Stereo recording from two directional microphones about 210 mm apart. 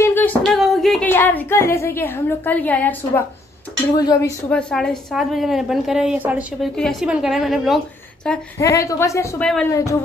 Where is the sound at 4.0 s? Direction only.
15° left (ahead or behind).